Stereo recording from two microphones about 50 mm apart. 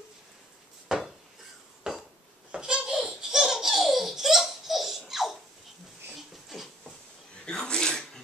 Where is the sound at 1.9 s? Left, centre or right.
Centre.